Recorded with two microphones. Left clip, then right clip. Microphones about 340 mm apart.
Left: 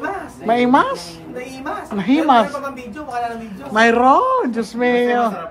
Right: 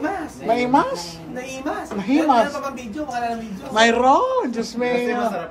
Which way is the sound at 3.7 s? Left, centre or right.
Centre.